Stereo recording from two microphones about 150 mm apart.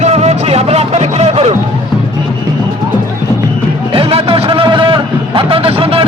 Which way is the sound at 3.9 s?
40° right (ahead or behind).